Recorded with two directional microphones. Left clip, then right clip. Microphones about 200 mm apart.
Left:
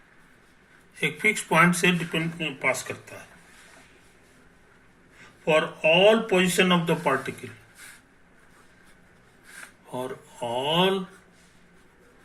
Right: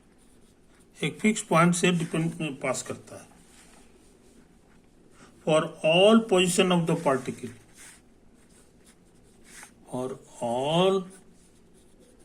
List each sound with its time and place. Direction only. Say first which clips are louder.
0.9 s speech: left 4 dB; 30° right (ahead or behind)
5.5 s speech: left 2 dB; 25° right (ahead or behind)
10.3 s mantra: even; centre (ahead or behind)
10.7 s speech: left 1 dB; 30° right (ahead or behind)